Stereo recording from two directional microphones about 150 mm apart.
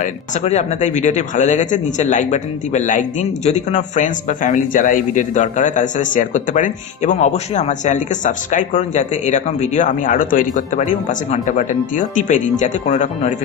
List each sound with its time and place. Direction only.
0.4 s speech: 50° left (ahead or behind)